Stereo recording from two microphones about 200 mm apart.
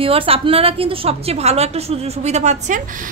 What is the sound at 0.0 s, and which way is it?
A woman's voice, 30° right (ahead or behind).